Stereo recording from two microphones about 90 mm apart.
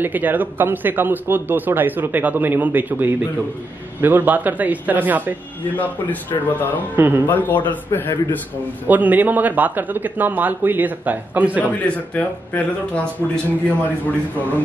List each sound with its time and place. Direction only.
0.0 s a man's voice: 20° right (ahead or behind)
5.8 s speech: 20° left (ahead or behind)
7.0 s a man's voice: 20° right (ahead or behind)
7.2 s speech: 20° left (ahead or behind)
8.8 s a man's voice: 20° right (ahead or behind)
11.6 s speech: 15° left (ahead or behind)